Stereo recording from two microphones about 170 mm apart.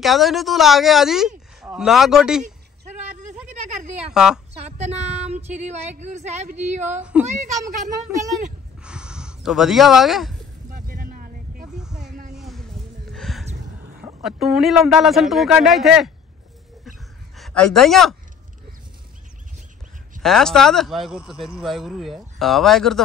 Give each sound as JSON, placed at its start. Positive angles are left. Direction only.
{"t": 0.0, "sound": "speech", "side_deg": 0}
{"t": 4.1, "sound": "speech", "side_deg": -5}
{"t": 4.6, "sound": "a woman's voice", "side_deg": -40}
{"t": 7.0, "sound": "speech", "side_deg": -5}
{"t": 7.2, "sound": "a child's voice", "side_deg": -45}
{"t": 8.8, "sound": "snort", "side_deg": -5}
{"t": 10.7, "sound": "vehicle", "side_deg": -55}
{"t": 11.7, "sound": "a sound", "side_deg": -5}
{"t": 12.1, "sound": "a sound", "side_deg": -50}
{"t": 12.4, "sound": "a sound", "side_deg": 0}
{"t": 13.1, "sound": "gasp", "side_deg": 0}
{"t": 14.2, "sound": "speech", "side_deg": 0}
{"t": 17.4, "sound": "a man's voice", "side_deg": 0}
{"t": 20.2, "sound": "speech", "side_deg": 0}